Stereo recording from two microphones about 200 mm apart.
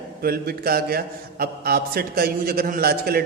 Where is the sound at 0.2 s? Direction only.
50° right (ahead or behind).